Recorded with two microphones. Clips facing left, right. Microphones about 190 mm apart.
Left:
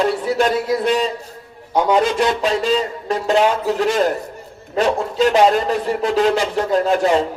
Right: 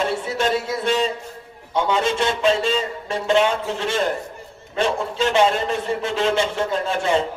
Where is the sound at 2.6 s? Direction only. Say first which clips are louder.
Left 4 dB; 40° left (ahead or behind).